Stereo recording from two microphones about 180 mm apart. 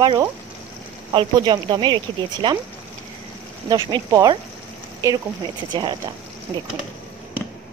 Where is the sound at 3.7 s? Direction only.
20° right (ahead or behind).